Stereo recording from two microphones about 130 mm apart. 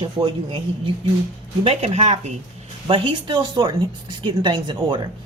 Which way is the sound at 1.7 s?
55° right (ahead or behind).